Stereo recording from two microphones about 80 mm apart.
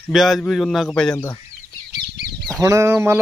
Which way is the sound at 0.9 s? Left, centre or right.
Centre.